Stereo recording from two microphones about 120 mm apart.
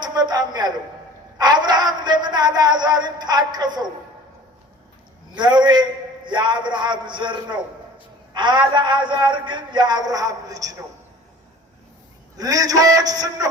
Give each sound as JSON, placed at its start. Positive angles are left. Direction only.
{"t": 0.0, "sound": "a sound", "side_deg": -35}
{"t": 1.4, "sound": "music", "side_deg": -35}
{"t": 5.3, "sound": "a man's voice", "side_deg": -40}
{"t": 12.4, "sound": "a man's voice", "side_deg": -30}